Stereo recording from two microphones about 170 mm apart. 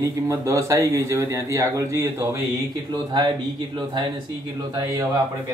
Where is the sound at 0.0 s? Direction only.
20° right (ahead or behind).